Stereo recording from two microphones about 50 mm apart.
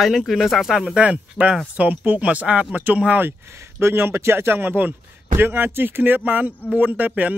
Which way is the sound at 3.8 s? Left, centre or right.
Right.